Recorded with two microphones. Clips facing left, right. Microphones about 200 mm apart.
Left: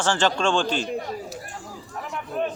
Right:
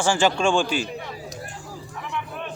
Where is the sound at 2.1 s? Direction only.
40° left (ahead or behind).